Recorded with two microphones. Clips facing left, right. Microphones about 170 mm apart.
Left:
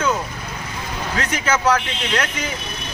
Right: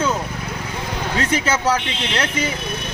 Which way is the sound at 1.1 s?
30° right (ahead or behind).